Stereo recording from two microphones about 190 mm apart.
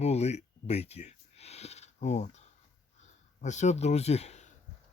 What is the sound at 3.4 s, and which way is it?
Speech, 40° left (ahead or behind).